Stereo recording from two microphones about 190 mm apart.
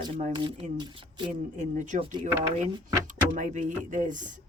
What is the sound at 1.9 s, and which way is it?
Speech, 45° right (ahead or behind).